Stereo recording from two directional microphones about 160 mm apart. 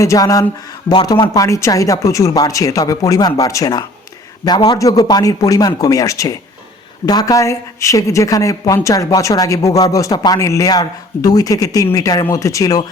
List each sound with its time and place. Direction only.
0.0 s a woman's voice: 20° left (ahead or behind)